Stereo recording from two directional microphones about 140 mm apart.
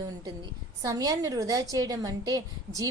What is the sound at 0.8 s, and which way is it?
A woman's voice, 25° right (ahead or behind).